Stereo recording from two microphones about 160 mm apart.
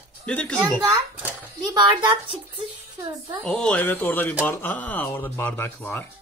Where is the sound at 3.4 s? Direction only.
5° left (ahead or behind).